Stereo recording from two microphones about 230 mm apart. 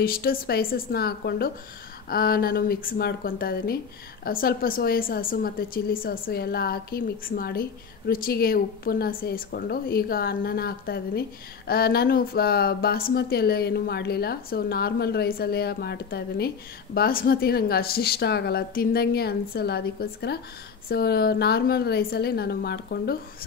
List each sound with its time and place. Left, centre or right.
0.0 s a woman's voice: left